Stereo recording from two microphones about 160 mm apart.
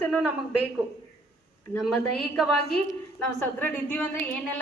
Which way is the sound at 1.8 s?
Centre (ahead or behind).